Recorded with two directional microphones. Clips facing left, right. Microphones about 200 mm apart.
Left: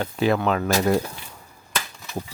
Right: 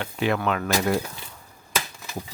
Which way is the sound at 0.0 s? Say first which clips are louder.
Left 4 dB; 35° left (ahead or behind).